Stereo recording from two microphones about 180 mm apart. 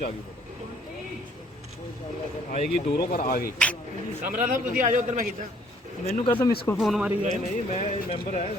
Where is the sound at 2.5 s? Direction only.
50° left (ahead or behind).